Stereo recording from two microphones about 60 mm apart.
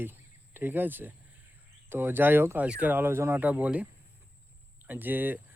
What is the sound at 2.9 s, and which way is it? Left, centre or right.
Speech, right.